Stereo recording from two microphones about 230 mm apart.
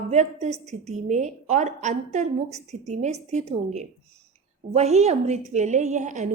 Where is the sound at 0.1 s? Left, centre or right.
Right.